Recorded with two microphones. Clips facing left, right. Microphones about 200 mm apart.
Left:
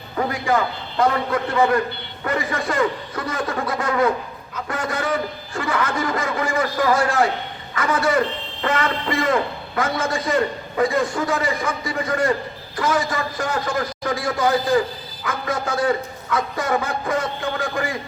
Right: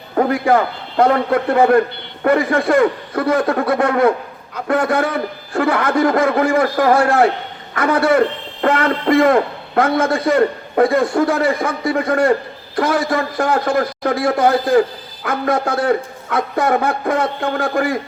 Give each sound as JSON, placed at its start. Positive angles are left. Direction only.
{"t": 0.2, "sound": "speech", "side_deg": -60}